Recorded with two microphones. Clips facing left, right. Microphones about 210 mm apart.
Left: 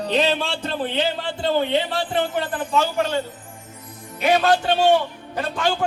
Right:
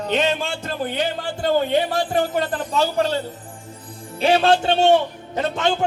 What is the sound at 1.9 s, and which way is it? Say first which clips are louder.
Jingle bell: right 2 dB; 45° right (ahead or behind).